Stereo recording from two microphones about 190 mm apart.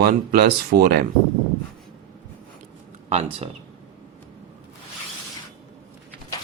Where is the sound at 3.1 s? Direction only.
35° right (ahead or behind).